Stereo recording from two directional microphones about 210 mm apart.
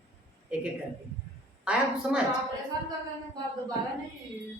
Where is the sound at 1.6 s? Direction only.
5° right (ahead or behind).